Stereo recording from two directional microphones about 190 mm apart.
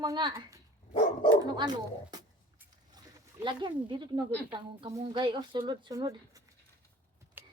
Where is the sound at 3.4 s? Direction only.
25° right (ahead or behind).